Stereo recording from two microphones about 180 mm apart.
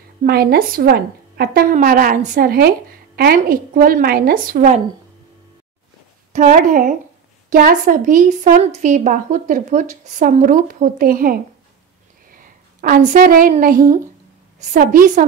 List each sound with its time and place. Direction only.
0.2 s a woman's voice: 55° right (ahead or behind)
6.3 s a woman's voice: 45° right (ahead or behind)